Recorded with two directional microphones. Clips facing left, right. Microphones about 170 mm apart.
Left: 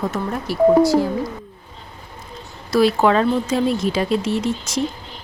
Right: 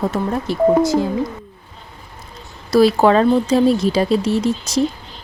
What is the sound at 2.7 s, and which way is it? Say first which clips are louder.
Speech: right 3 dB; 35° right (ahead or behind).